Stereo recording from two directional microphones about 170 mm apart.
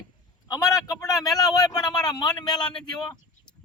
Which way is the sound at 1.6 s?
25° left (ahead or behind).